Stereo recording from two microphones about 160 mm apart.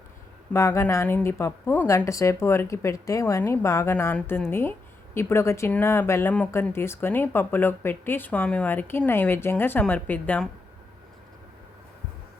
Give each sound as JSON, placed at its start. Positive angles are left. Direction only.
{"t": 0.5, "sound": "speech", "side_deg": 15}